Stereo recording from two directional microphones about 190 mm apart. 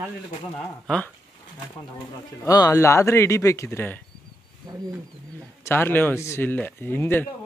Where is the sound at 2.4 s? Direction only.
20° left (ahead or behind).